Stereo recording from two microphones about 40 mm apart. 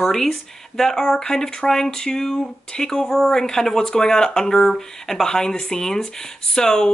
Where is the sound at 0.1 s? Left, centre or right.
Centre.